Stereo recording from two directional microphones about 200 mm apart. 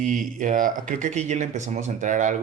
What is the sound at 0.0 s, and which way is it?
Speech, 40° right (ahead or behind).